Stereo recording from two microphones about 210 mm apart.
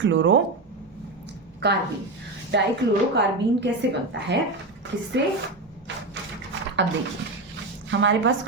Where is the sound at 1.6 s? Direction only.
55° right (ahead or behind).